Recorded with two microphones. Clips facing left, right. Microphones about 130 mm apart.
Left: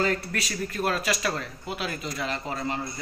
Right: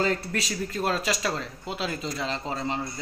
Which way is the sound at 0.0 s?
25° right (ahead or behind).